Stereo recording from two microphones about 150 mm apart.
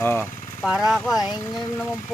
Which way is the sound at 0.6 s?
5° right (ahead or behind).